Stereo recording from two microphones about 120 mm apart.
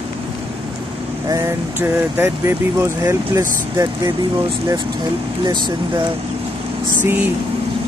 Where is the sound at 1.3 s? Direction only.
20° right (ahead or behind).